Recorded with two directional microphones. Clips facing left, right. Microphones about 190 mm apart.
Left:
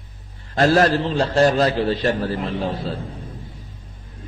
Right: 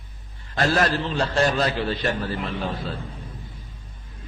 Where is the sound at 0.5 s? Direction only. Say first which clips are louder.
Left 6 dB; 35° left (ahead or behind).